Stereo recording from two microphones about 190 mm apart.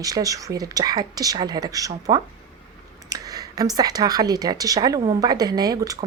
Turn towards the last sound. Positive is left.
turn(degrees=-20)  # may be behind; listen again after turning